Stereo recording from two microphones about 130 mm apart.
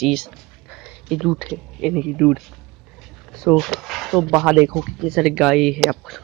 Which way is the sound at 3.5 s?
Centre (ahead or behind).